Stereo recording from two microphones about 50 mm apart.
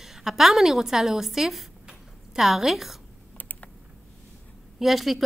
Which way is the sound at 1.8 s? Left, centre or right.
Centre.